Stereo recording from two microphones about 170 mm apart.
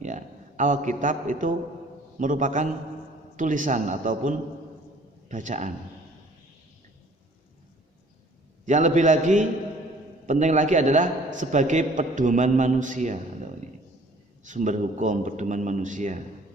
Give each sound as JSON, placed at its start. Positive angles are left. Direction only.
{"t": 0.0, "sound": "a man's voice", "side_deg": -45}
{"t": 8.6, "sound": "a man's voice", "side_deg": -45}